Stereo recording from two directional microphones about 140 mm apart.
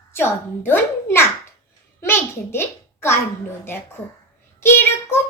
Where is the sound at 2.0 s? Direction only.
15° left (ahead or behind).